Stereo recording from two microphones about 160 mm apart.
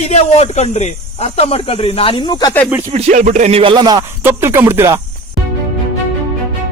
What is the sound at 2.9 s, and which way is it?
Speech, 45° right (ahead or behind).